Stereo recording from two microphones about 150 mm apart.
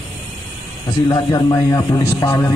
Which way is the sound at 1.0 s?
20° left (ahead or behind).